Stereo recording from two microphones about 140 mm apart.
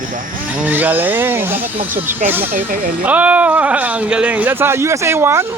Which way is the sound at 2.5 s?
75° right (ahead or behind).